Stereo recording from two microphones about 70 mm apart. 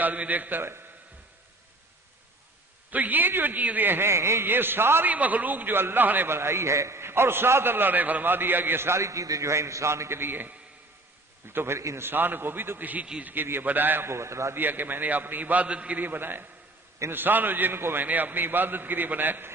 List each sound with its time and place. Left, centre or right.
0.0 s a man's voice: right
2.9 s a man's voice: right
5.1 s a man's voice: right
12.0 s a man's voice: right
14.6 s a man's voice: right